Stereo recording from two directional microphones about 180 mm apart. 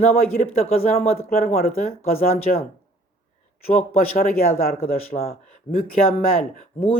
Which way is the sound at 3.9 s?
55° left (ahead or behind).